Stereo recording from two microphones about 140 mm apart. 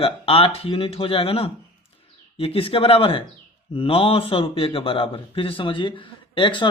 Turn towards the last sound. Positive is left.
turn(degrees=35)  # may be behind; listen again after turning